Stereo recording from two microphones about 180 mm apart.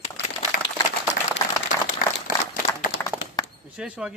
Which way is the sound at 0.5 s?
50° left (ahead or behind).